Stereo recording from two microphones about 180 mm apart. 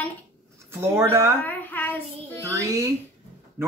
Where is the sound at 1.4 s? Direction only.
10° left (ahead or behind).